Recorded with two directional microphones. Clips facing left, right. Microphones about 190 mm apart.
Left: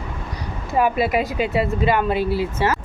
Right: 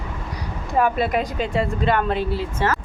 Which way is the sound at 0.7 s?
5° left (ahead or behind).